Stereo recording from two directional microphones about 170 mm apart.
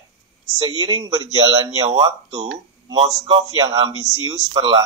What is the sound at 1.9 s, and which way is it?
Speech, 35° right (ahead or behind).